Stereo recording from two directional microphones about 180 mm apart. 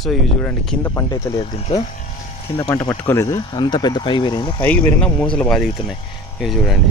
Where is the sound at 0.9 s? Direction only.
20° left (ahead or behind).